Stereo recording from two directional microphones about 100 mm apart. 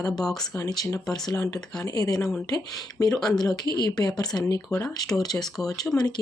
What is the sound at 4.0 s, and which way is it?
Speech, 45° left (ahead or behind).